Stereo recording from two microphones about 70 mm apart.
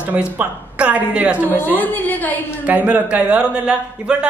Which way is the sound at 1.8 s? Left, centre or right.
Left.